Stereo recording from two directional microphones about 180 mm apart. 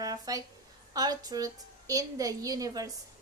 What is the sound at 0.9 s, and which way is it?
A woman's voice, 20° right (ahead or behind).